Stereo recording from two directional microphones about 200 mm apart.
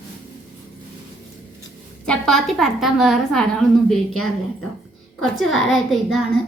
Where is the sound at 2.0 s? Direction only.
5° left (ahead or behind).